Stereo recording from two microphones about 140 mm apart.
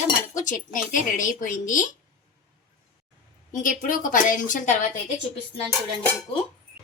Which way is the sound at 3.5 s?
70° left (ahead or behind).